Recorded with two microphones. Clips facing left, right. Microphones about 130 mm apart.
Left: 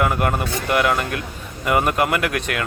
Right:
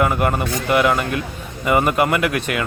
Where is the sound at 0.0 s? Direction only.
Centre (ahead or behind).